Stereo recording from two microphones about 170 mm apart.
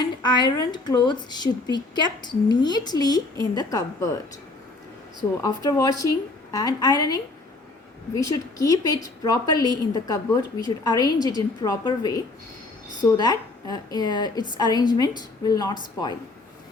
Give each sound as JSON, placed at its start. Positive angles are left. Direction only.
{"t": 0.0, "sound": "speech", "side_deg": 25}
{"t": 5.4, "sound": "speech", "side_deg": 25}